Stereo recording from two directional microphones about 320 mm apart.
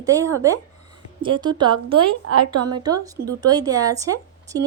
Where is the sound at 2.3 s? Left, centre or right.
Right.